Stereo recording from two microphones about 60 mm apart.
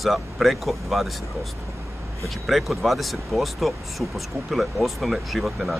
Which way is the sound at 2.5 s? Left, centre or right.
Centre.